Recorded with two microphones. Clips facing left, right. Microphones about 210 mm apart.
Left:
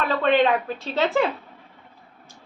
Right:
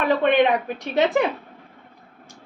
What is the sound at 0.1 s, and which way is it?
A woman's voice, 15° right (ahead or behind).